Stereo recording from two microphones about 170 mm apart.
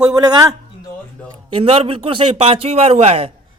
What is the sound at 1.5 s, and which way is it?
A man's voice, 35° right (ahead or behind).